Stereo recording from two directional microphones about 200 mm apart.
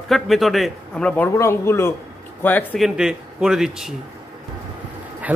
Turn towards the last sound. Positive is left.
turn(degrees=-5)  # may be behind; listen again after turning